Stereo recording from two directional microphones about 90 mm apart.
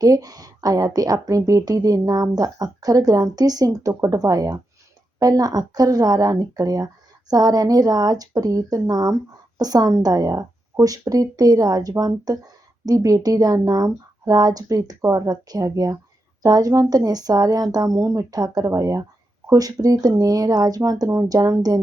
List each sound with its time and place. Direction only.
0.0 s speech: 45° right (ahead or behind)